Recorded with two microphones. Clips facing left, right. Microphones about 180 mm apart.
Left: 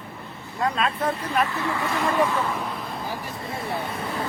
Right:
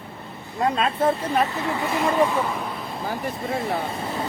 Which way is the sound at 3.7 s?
25° right (ahead or behind).